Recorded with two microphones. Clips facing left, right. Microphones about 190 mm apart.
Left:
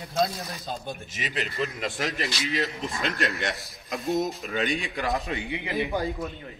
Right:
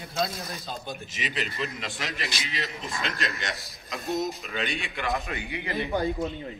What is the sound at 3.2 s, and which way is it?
A man's voice, 60° left (ahead or behind).